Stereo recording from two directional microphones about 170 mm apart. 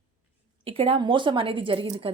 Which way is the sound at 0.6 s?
30° right (ahead or behind).